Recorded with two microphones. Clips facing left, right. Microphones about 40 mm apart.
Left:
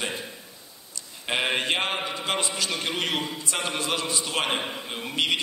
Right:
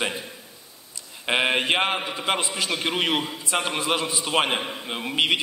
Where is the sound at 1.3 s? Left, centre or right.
Centre.